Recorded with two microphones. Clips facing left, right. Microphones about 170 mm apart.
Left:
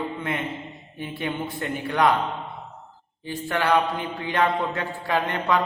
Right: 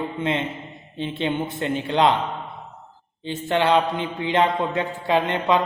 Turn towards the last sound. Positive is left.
turn(degrees=-20)  # may be behind; listen again after turning